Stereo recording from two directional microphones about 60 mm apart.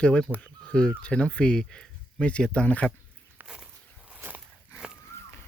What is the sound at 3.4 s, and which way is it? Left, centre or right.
Walk, centre.